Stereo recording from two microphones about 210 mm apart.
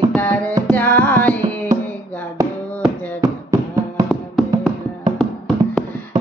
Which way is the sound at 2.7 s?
10° left (ahead or behind).